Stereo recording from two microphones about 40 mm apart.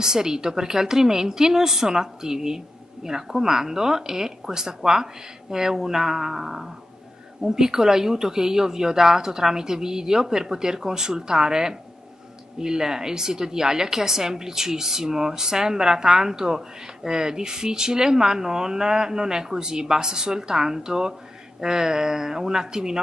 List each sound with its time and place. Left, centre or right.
0.0 s a woman's voice: centre